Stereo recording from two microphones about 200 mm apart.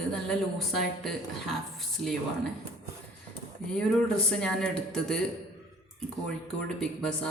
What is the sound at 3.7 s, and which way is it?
A man's voice, 5° left (ahead or behind).